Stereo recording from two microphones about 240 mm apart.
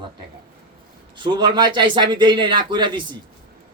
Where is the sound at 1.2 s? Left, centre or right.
Centre.